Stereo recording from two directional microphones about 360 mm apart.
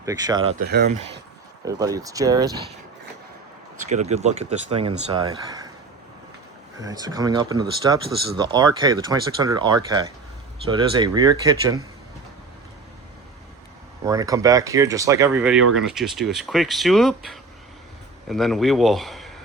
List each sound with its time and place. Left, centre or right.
0.0 s speech: centre
0.7 s speech: right
3.8 s speech: centre
6.7 s speech: centre
14.0 s speech: centre